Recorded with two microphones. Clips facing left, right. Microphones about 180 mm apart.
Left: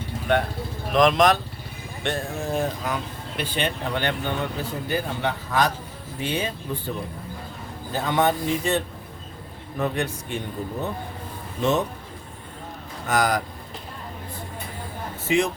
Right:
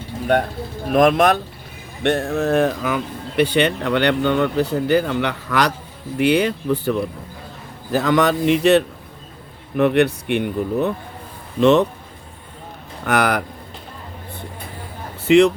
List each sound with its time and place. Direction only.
0.9 s speech: 55° right (ahead or behind)
2.0 s speech: 65° right (ahead or behind)
13.1 s speech: 65° right (ahead or behind)
15.3 s speech: 70° right (ahead or behind)